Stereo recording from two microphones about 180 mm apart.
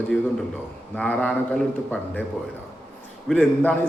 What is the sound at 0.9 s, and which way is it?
A man's voice, 5° left (ahead or behind).